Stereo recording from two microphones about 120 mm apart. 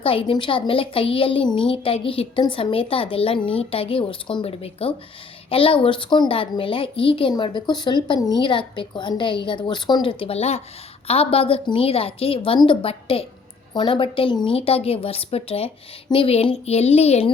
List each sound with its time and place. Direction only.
0.0 s a woman's voice: 50° left (ahead or behind)
4.4 s a woman's voice: 55° left (ahead or behind)